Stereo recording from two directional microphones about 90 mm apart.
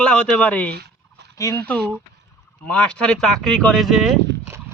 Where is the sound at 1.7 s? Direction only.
15° left (ahead or behind); by 4.1 s 5° right (ahead or behind).